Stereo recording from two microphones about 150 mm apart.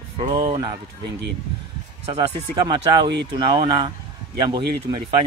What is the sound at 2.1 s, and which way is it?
Speech, 30° right (ahead or behind).